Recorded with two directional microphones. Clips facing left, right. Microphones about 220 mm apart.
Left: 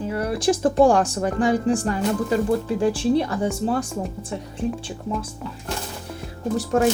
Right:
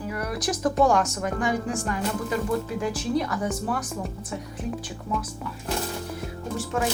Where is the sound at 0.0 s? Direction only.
30° left (ahead or behind).